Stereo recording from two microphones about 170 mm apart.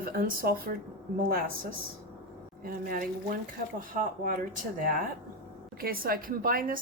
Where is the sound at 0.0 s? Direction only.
60° right (ahead or behind).